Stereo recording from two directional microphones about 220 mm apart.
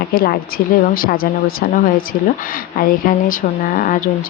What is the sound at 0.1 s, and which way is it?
A woman's voice, 40° left (ahead or behind).